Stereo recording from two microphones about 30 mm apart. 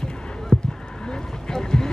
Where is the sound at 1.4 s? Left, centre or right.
Left.